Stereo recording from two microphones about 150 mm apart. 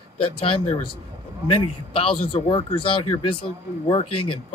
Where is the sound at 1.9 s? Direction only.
35° left (ahead or behind).